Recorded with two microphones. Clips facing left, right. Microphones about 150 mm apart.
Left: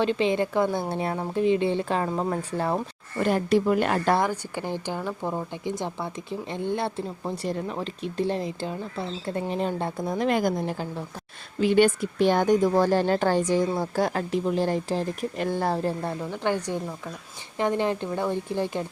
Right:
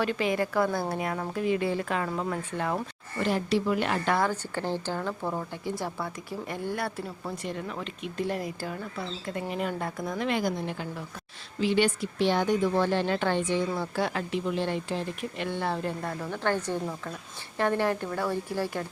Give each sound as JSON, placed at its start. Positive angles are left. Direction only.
{"t": 0.0, "sound": "speech", "side_deg": 25}
{"t": 3.2, "sound": "a woman's voice", "side_deg": 50}
{"t": 4.2, "sound": "speech", "side_deg": 15}
{"t": 16.2, "sound": "speech", "side_deg": 15}